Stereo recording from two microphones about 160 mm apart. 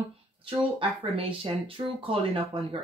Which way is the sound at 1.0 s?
35° right (ahead or behind).